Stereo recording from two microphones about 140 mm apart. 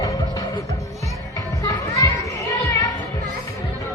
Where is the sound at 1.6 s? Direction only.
25° left (ahead or behind).